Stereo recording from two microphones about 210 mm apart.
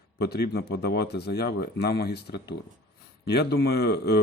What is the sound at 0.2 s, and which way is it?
Speech, 50° left (ahead or behind).